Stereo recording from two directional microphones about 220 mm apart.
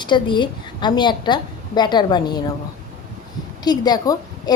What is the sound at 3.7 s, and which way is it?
Speech, 20° left (ahead or behind).